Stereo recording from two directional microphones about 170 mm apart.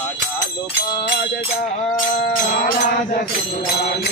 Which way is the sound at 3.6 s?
70° left (ahead or behind).